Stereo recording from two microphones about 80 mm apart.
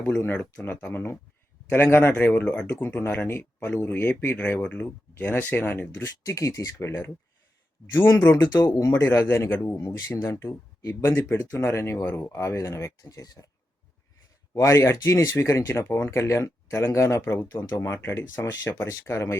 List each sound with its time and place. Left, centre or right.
0.6 s speech: left
5.9 s speech: left
8.3 s speech: left
9.0 s speech: left
10.4 s speech: left
14.5 s speech: left